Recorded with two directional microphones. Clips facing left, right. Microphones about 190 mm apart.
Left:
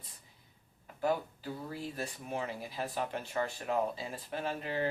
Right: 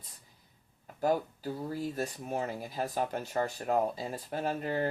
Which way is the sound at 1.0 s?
40° right (ahead or behind).